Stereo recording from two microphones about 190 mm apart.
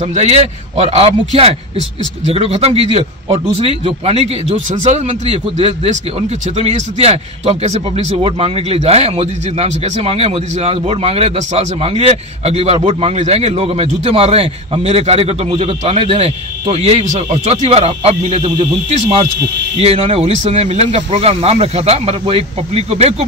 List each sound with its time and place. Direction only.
0.1 s a man's voice: 35° right (ahead or behind)